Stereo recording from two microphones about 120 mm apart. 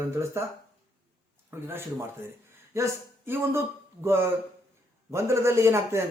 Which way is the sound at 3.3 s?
20° right (ahead or behind).